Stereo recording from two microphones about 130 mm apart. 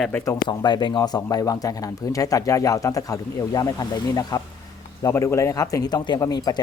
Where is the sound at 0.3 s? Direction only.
35° left (ahead or behind).